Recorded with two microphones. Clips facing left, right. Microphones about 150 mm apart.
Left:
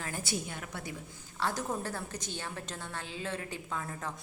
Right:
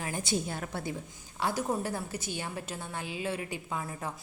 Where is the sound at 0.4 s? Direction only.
35° right (ahead or behind).